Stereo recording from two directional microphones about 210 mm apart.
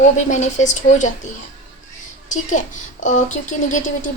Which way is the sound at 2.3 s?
35° left (ahead or behind).